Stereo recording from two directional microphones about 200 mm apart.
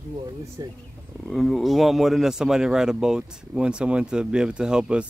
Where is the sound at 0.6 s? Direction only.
20° right (ahead or behind).